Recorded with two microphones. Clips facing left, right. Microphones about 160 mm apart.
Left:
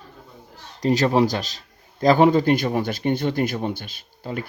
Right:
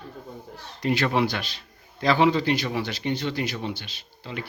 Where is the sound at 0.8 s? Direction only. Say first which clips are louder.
Left 5 dB; 40° left (ahead or behind).